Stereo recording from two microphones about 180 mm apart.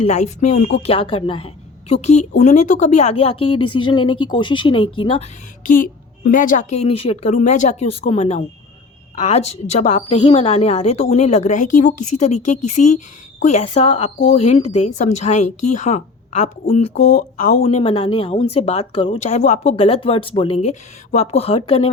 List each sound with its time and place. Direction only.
0.0 s a woman's voice: 40° left (ahead or behind)
1.9 s speech: 40° left (ahead or behind)
5.6 s a woman's voice: 50° left (ahead or behind)
17.6 s a woman's voice: 35° left (ahead or behind)